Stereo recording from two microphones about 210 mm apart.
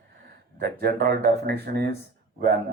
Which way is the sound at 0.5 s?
50° right (ahead or behind).